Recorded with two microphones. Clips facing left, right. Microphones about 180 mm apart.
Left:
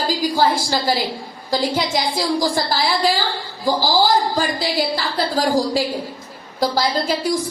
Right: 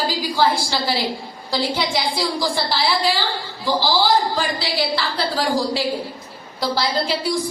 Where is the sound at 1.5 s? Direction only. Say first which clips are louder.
Left 2 dB; 45° left (ahead or behind).